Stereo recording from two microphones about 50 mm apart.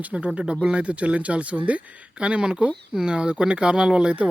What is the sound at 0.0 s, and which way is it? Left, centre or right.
Speech, right.